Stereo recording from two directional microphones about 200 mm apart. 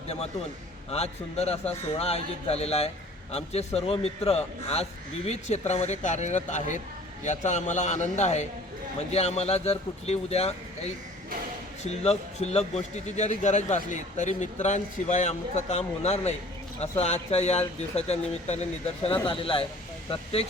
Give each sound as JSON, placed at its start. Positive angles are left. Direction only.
{"t": 0.9, "sound": "a man's voice", "side_deg": 30}